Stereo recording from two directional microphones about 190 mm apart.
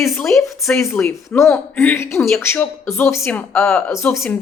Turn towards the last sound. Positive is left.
turn(degrees=0)  # may be behind; listen again after turning